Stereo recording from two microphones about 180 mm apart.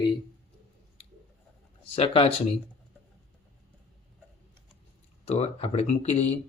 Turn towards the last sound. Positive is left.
turn(degrees=35)  # may be behind; listen again after turning